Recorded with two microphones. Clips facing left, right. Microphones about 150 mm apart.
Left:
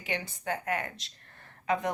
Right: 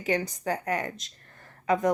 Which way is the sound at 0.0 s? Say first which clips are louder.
Right 7 dB; 40° right (ahead or behind).